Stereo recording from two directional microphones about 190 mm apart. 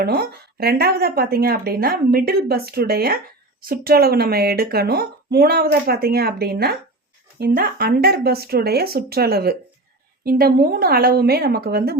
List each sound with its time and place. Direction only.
0.0 s a woman's voice: 55° right (ahead or behind)